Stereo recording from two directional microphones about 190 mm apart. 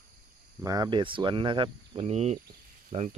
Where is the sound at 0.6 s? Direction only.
20° right (ahead or behind).